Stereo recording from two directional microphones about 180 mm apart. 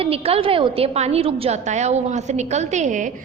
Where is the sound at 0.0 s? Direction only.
35° right (ahead or behind).